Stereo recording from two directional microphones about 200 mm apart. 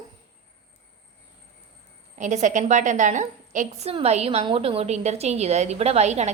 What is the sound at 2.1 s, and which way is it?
A woman's voice, 35° right (ahead or behind).